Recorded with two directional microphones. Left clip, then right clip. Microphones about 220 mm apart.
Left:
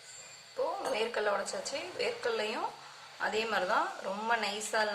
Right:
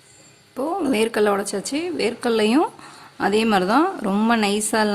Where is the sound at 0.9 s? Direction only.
45° right (ahead or behind).